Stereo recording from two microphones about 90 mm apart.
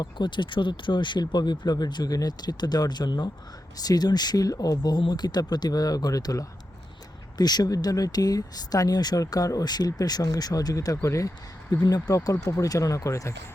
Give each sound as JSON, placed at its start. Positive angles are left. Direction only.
{"t": 0.0, "sound": "speech", "side_deg": 60}